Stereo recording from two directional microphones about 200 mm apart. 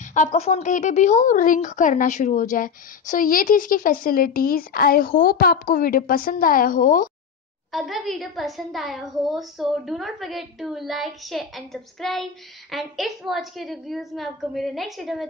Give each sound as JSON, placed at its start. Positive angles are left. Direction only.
{"t": 0.1, "sound": "a woman's voice", "side_deg": 35}
{"t": 7.7, "sound": "a woman's voice", "side_deg": 0}